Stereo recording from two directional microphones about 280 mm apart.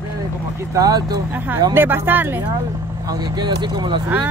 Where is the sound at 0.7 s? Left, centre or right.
Centre.